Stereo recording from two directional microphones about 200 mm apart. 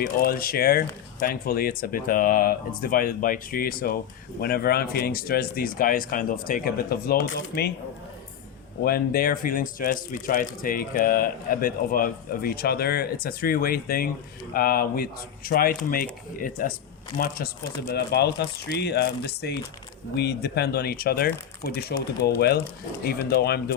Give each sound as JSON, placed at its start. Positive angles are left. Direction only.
{"t": 0.0, "sound": "speech", "side_deg": 45}
{"t": 8.8, "sound": "speech", "side_deg": 50}